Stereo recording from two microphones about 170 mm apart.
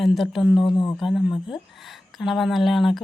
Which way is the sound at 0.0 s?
Centre (ahead or behind).